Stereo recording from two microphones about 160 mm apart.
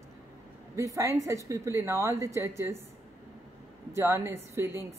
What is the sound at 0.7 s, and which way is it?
A woman's voice, 20° right (ahead or behind).